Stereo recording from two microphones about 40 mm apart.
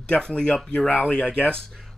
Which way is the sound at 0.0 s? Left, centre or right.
Left.